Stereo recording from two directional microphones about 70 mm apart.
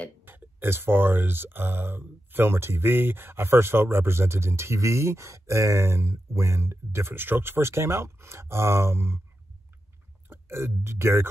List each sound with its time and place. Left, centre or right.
0.2 s speech: right
10.3 s speech: right